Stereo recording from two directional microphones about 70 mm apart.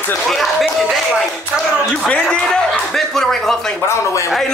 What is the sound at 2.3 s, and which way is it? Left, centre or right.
Speech, centre.